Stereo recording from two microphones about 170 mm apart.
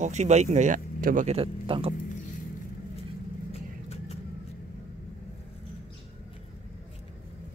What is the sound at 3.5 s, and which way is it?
Vehicle, 40° left (ahead or behind).